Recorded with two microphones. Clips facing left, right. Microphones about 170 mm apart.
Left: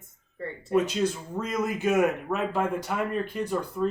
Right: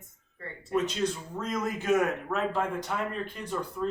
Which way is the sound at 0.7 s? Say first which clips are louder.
Left 4 dB; 5° left (ahead or behind).